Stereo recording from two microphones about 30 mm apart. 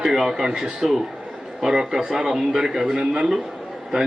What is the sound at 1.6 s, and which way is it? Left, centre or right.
A man's voice, centre.